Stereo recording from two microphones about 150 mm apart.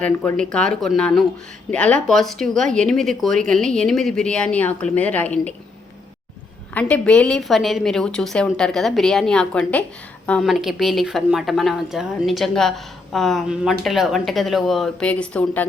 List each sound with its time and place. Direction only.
0.0 s speech: 5° left (ahead or behind)
6.7 s speech: 10° left (ahead or behind)